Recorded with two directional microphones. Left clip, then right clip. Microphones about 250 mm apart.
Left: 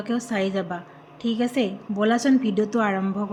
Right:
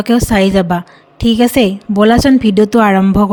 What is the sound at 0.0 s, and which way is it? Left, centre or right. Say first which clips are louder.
Speech: right 14 dB; right.